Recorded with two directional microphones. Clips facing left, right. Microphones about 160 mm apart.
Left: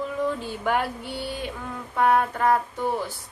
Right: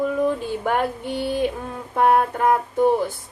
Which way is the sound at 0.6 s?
50° right (ahead or behind).